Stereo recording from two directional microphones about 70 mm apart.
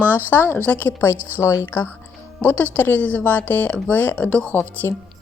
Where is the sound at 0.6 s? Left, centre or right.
Left.